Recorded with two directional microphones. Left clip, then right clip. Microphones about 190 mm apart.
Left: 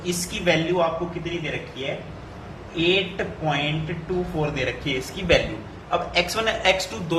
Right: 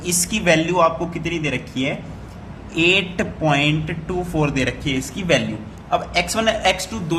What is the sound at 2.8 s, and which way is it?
A man's voice, 55° right (ahead or behind).